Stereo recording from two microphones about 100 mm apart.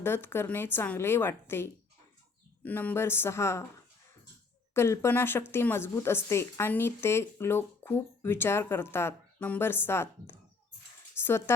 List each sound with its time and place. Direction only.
0.0 s speech: 20° left (ahead or behind)
4.7 s speech: 25° left (ahead or behind)